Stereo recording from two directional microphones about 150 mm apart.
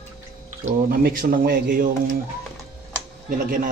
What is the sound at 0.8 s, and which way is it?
A man's voice, 80° right.